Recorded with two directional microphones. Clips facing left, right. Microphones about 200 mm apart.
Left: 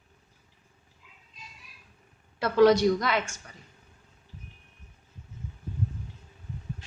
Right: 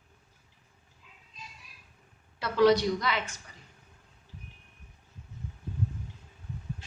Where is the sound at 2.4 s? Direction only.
50° left (ahead or behind).